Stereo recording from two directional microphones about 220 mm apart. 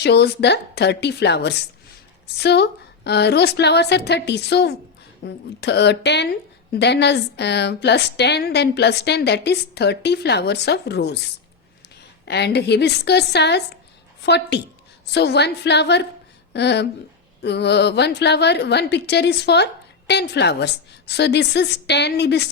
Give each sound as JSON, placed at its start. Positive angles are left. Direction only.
{"t": 0.0, "sound": "a woman's voice", "side_deg": 50}
{"t": 12.2, "sound": "a woman's voice", "side_deg": 50}